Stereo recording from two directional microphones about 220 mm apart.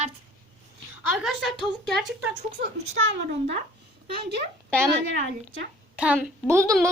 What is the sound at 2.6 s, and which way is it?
Speech, 55° right (ahead or behind).